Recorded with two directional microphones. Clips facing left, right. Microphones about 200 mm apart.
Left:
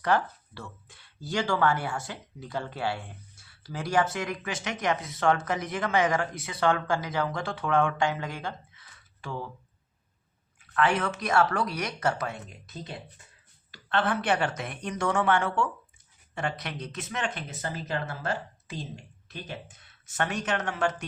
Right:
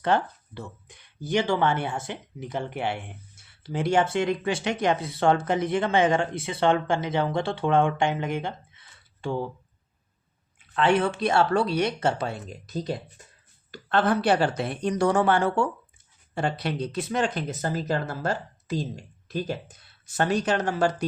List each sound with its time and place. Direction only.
0.0 s speech: 20° right (ahead or behind)
10.6 s speech: 25° right (ahead or behind)